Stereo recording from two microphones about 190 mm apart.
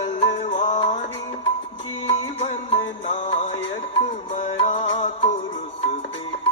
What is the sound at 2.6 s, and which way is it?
Music, 35° left (ahead or behind).